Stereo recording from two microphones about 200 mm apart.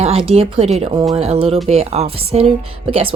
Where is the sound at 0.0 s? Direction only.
30° right (ahead or behind).